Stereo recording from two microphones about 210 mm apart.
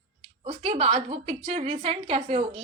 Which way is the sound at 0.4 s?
30° right (ahead or behind).